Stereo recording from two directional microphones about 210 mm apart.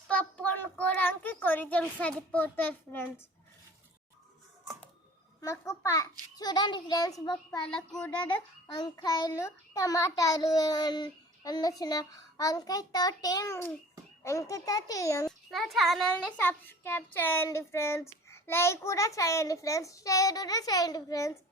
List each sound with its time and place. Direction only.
0.1 s child singing: 5° left (ahead or behind)
5.4 s a child's voice: 15° left (ahead or behind)
7.6 s a child's voice: 5° left (ahead or behind)
8.7 s a child's voice: 20° left (ahead or behind)
15.4 s a child's voice: centre (ahead or behind); by 21.3 s 15° left (ahead or behind)